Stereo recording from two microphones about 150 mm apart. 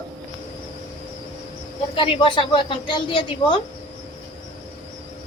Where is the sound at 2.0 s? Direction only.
35° left (ahead or behind).